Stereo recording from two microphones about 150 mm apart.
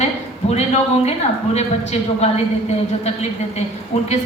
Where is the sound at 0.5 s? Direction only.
45° left (ahead or behind).